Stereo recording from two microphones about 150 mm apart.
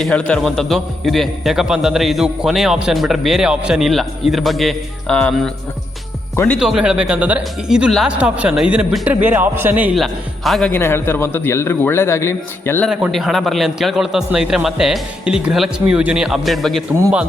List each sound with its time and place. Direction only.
0.0 s a man's voice: 5° left (ahead or behind)
6.3 s speech: 15° left (ahead or behind)
6.6 s speech: 5° right (ahead or behind)
10.7 s a man's voice: 15° left (ahead or behind)
12.9 s a man's voice: centre (ahead or behind)